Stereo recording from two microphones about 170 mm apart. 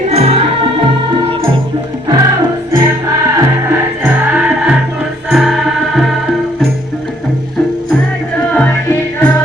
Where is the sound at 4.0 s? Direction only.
5° right (ahead or behind).